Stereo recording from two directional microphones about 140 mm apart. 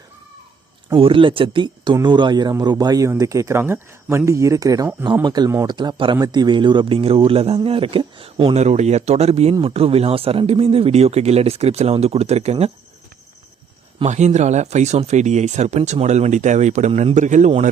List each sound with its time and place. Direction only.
0.9 s speech: 40° right (ahead or behind)
8.5 s speech: 55° right (ahead or behind)
14.0 s speech: 55° right (ahead or behind)